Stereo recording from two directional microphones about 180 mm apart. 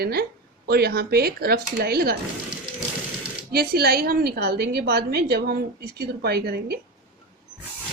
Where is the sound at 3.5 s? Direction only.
60° right (ahead or behind).